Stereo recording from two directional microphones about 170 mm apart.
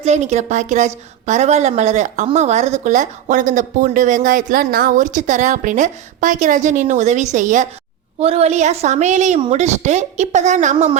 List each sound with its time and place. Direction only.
0.0 s a woman's voice: 40° right (ahead or behind)
8.2 s a woman's voice: 35° right (ahead or behind)